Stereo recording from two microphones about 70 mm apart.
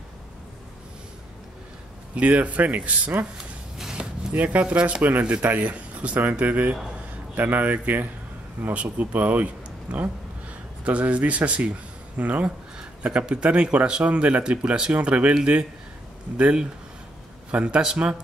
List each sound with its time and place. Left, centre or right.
2.1 s speech: centre
3.3 s a sound: centre
4.3 s a man's voice: right